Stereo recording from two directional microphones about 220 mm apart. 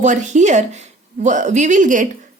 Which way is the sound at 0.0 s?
35° right (ahead or behind).